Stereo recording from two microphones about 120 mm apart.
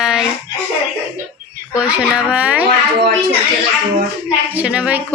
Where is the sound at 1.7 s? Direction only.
10° right (ahead or behind).